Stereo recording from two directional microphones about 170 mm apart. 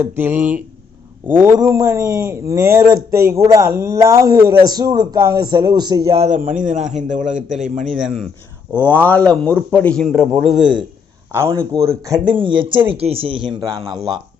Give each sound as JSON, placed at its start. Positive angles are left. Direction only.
{"t": 0.0, "sound": "speech", "side_deg": -10}
{"t": 6.1, "sound": "a man's voice", "side_deg": -40}
{"t": 7.9, "sound": "speech", "side_deg": 0}
{"t": 8.8, "sound": "a man's voice", "side_deg": 10}
{"t": 10.6, "sound": "speech", "side_deg": -25}
{"t": 11.8, "sound": "speech", "side_deg": -20}